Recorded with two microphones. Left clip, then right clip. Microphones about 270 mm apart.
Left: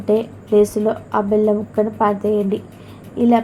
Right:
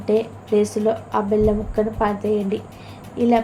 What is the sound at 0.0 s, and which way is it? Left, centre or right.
A woman's voice, centre.